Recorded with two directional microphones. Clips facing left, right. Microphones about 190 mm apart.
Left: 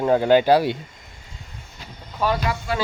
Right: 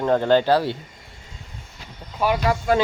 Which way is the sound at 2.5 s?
50° right (ahead or behind).